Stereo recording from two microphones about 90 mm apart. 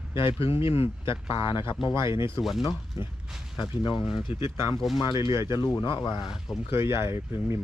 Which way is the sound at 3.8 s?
60° left (ahead or behind).